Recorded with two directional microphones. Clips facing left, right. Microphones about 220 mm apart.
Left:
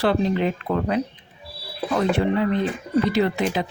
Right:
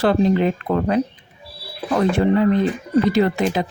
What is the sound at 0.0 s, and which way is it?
Speech, 45° right (ahead or behind).